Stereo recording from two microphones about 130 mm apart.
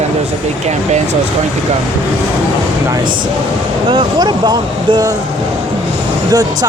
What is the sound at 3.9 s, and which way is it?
Speech, 40° right (ahead or behind).